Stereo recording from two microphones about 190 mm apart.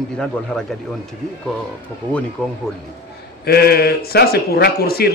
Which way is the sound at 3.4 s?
55° left (ahead or behind).